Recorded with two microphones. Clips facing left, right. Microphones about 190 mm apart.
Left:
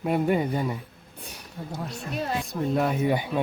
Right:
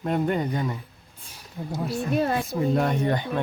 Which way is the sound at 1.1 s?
65° left (ahead or behind).